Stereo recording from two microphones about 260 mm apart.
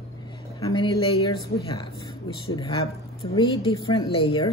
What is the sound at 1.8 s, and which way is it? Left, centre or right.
A woman's voice, centre.